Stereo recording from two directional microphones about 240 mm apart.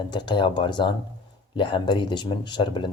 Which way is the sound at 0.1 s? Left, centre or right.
Centre.